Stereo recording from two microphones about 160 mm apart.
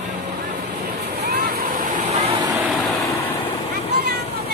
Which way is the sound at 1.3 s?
75° right (ahead or behind).